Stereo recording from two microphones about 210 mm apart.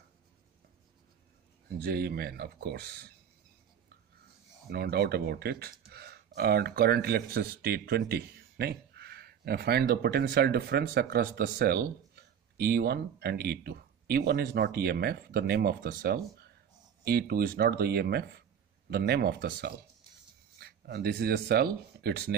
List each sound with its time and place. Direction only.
1.8 s speech: 50° right (ahead or behind)
4.6 s speech: 50° right (ahead or behind)